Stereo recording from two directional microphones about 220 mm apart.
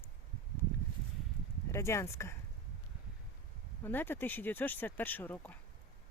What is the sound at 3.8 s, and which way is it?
Speech, 10° left (ahead or behind).